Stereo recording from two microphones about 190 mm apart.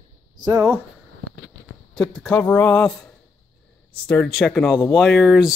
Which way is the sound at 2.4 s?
15° left (ahead or behind).